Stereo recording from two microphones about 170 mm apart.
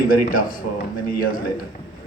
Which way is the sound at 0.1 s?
55° left (ahead or behind).